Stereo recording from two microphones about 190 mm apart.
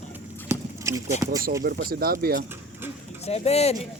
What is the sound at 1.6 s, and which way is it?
Speech, 55° right (ahead or behind).